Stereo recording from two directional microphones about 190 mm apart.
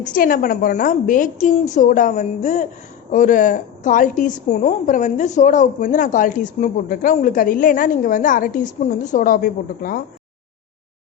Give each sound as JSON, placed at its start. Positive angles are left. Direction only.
{"t": 0.0, "sound": "a woman's voice", "side_deg": 45}